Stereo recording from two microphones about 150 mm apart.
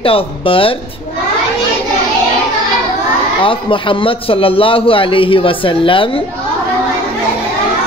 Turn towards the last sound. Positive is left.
turn(degrees=35)  # may be behind; listen again after turning